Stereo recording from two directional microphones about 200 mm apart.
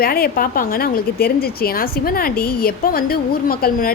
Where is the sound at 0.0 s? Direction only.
50° left (ahead or behind).